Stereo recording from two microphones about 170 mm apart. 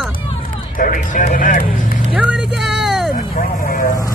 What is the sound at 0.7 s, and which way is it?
Speech, 55° left (ahead or behind).